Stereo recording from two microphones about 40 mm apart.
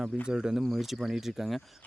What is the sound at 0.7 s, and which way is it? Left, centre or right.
Speech, centre.